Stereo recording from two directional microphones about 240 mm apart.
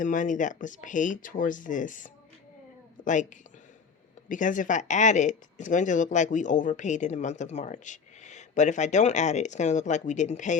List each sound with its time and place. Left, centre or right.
0.0 s speech: left
4.3 s speech: left